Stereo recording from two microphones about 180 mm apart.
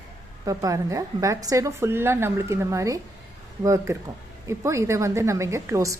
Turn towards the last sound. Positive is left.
turn(degrees=-15)  # may be behind; listen again after turning